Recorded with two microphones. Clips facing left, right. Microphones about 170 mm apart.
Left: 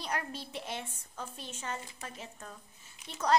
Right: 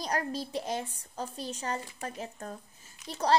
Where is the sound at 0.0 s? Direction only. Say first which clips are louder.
Right 5 dB; 40° right (ahead or behind).